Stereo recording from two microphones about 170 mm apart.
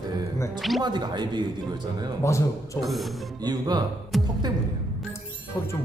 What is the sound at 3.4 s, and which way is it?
Speech, 25° right (ahead or behind).